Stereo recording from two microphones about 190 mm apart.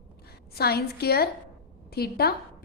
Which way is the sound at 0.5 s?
55° left (ahead or behind).